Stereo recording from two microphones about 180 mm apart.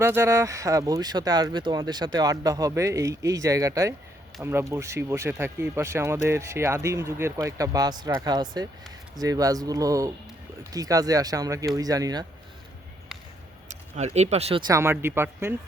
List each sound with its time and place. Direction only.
0.0 s speech: 15° right (ahead or behind)
13.7 s speech: 40° right (ahead or behind)
14.7 s speech: 15° right (ahead or behind)